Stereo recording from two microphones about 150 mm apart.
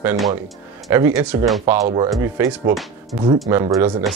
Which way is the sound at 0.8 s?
20° right (ahead or behind).